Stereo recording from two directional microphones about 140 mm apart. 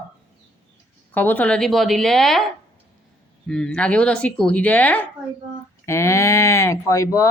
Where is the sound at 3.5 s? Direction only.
5° left (ahead or behind).